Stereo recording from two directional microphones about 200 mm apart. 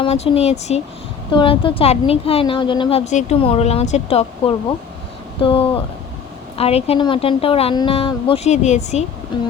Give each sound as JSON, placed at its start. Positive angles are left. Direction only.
{"t": 0.0, "sound": "a woman's voice", "side_deg": 30}
{"t": 9.3, "sound": "a woman's voice", "side_deg": 25}